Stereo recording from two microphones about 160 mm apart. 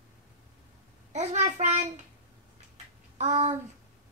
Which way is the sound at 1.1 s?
45° right (ahead or behind).